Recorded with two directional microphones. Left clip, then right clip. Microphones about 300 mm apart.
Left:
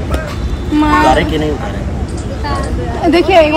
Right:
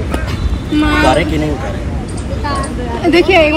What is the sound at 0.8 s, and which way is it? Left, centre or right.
Speech, centre.